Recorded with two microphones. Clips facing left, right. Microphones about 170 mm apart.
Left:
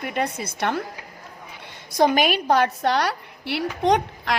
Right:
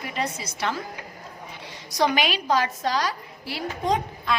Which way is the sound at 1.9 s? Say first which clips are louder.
Left 4 dB; 50° left (ahead or behind).